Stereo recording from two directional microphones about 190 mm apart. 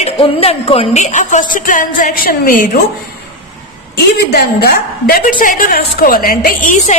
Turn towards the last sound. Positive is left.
turn(degrees=45)  # may be behind; listen again after turning